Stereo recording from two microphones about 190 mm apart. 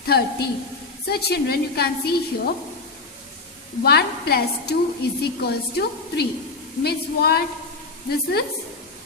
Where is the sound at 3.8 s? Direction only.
60° left (ahead or behind).